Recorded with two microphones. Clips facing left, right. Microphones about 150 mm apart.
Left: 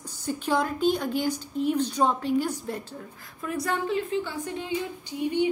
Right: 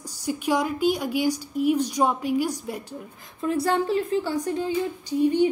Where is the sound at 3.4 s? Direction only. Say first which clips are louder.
Right 5 dB; 30° right (ahead or behind).